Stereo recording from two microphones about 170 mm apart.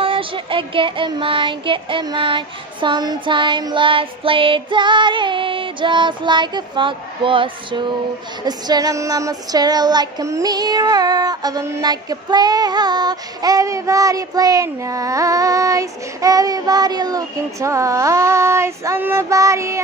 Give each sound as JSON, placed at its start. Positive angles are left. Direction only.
{"t": 0.0, "sound": "female singing", "side_deg": -30}